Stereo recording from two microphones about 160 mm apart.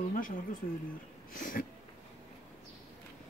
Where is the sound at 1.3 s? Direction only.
55° left (ahead or behind).